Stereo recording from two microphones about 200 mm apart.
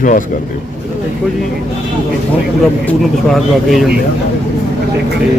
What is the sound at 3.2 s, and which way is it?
Speech, centre (ahead or behind).